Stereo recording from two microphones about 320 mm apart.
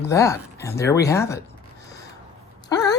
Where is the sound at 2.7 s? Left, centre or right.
Centre.